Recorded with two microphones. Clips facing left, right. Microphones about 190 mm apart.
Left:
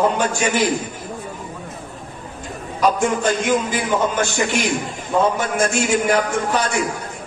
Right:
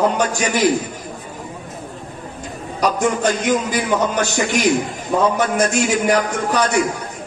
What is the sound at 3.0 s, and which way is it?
A man's voice, 40° right (ahead or behind).